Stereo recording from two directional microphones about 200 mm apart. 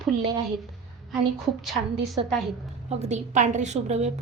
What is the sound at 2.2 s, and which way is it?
Speech, 25° right (ahead or behind).